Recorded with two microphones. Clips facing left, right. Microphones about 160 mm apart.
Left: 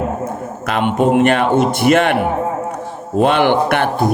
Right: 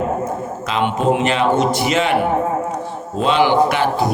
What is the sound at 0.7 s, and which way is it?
A man's voice, 55° left (ahead or behind).